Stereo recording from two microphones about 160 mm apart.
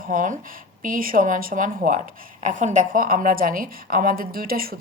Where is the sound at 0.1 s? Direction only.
55° right (ahead or behind).